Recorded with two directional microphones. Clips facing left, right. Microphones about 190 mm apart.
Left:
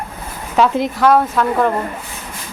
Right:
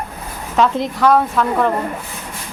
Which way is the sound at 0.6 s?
5° left (ahead or behind).